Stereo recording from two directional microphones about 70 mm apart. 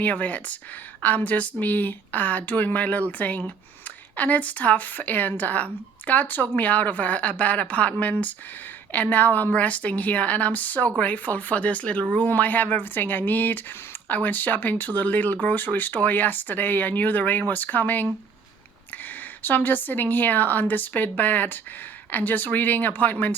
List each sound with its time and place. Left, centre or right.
0.0 s speech: left